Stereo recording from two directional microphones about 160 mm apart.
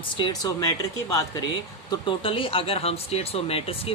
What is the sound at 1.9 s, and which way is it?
Speech, 35° left (ahead or behind).